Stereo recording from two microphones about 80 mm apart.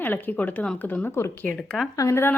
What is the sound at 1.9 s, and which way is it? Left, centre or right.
Speech, left.